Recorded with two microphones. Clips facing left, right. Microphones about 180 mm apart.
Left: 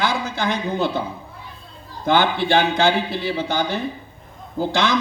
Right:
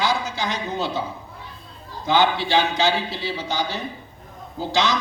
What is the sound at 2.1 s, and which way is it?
A man's voice, 55° left (ahead or behind).